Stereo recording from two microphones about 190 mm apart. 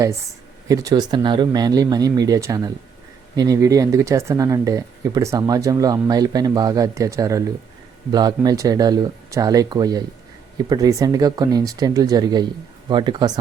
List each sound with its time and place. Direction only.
0.7 s speech: 20° right (ahead or behind)